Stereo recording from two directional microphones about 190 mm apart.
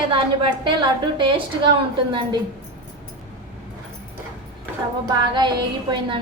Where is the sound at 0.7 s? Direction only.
25° right (ahead or behind).